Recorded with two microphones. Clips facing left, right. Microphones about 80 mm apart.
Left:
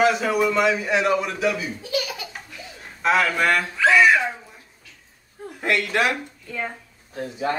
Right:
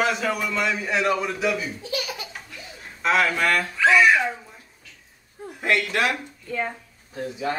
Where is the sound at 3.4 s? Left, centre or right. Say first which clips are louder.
Left 2 dB; left.